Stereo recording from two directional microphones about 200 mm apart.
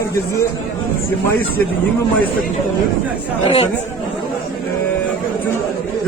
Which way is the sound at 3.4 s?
30° left (ahead or behind).